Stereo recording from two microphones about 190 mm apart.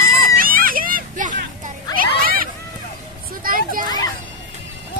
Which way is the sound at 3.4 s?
45° right (ahead or behind).